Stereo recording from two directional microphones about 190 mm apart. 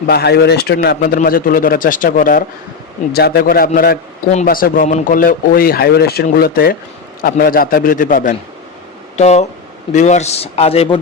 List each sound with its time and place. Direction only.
0.1 s speech: 55° left (ahead or behind)
1.0 s a man's voice: 50° left (ahead or behind); by 11.0 s 30° left (ahead or behind)